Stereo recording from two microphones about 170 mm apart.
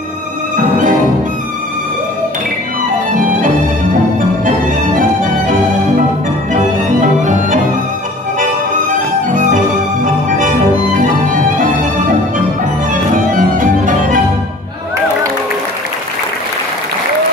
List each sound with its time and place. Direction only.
0.6 s music: 50° right (ahead or behind)
3.1 s music: 50° right (ahead or behind)
4.9 s music: 50° right (ahead or behind)
9.3 s music: 50° right (ahead or behind)
13.1 s music: 50° right (ahead or behind)